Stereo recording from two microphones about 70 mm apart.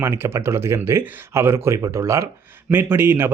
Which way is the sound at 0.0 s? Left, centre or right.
Right.